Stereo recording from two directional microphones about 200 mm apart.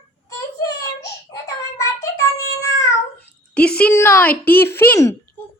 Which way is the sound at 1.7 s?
15° left (ahead or behind).